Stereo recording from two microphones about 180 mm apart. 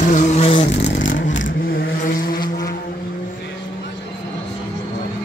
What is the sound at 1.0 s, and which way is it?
Vehicle, 90° left.